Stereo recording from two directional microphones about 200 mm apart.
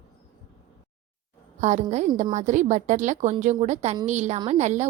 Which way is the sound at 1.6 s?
35° right (ahead or behind).